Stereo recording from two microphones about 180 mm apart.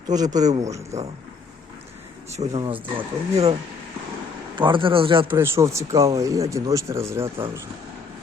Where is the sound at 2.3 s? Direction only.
35° right (ahead or behind).